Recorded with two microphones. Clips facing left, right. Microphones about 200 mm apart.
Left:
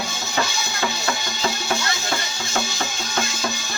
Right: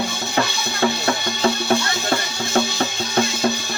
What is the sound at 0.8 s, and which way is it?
Music, 60° right (ahead or behind).